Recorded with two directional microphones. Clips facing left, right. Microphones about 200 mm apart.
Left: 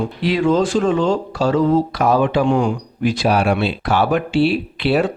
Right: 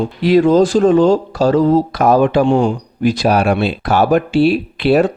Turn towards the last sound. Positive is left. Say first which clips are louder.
# right 5 dB
turn(degrees=-45)  # may be behind; listen again after turning